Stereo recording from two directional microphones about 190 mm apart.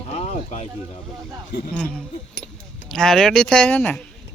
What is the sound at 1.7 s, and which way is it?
Speech, 5° left (ahead or behind).